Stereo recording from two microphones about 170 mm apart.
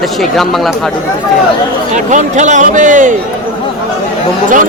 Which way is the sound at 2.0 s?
45° right (ahead or behind).